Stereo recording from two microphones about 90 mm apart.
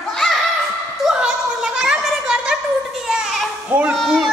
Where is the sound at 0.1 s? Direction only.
5° left (ahead or behind).